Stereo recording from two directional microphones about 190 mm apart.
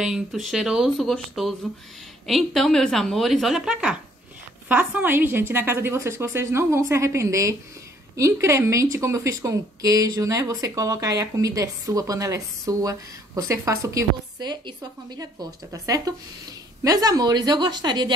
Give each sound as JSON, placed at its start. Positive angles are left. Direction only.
{"t": 0.0, "sound": "a woman's voice", "side_deg": 0}